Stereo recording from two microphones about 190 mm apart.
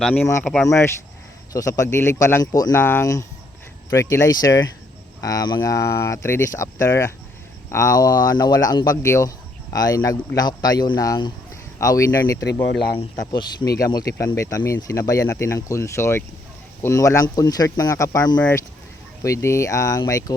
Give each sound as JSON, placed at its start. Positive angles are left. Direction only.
{"t": 0.0, "sound": "speech", "side_deg": 10}
{"t": 18.3, "sound": "speech", "side_deg": 5}